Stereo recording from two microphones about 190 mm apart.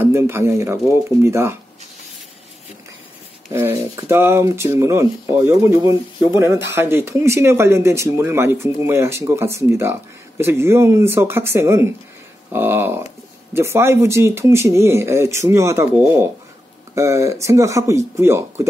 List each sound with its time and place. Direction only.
0.0 s speech: 10° right (ahead or behind)
3.5 s speech: 10° right (ahead or behind)